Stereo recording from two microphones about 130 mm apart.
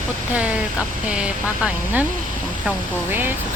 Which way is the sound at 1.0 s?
5° right (ahead or behind).